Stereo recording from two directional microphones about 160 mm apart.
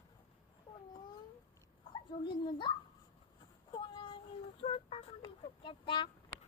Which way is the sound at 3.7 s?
30° left (ahead or behind).